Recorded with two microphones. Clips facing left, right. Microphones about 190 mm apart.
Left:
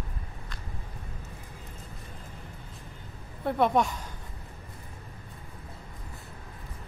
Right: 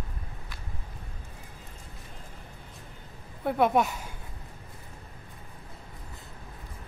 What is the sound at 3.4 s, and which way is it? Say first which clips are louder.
Speech: right 1 dB; 5° right (ahead or behind).